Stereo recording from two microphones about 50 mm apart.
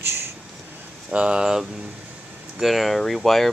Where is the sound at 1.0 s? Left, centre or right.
Centre.